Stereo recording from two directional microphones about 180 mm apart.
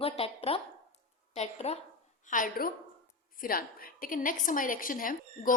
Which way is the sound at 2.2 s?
45° left (ahead or behind).